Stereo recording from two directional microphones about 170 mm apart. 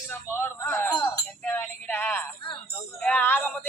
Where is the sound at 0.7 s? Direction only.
5° left (ahead or behind).